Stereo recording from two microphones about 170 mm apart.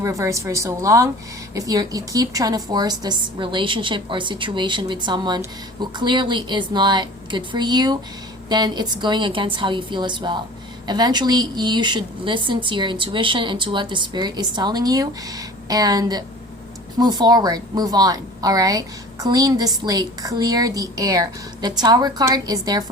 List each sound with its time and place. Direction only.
0.0 s a woman's voice: 20° right (ahead or behind)